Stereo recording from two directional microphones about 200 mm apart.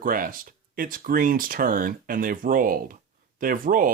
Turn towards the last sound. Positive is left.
turn(degrees=-45)  # may be behind; listen again after turning